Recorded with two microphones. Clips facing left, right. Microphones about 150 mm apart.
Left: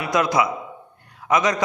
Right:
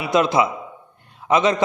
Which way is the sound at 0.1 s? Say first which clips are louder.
Right 3 dB; 25° right (ahead or behind).